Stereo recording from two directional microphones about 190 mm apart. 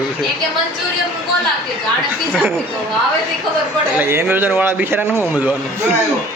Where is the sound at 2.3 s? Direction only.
Centre (ahead or behind).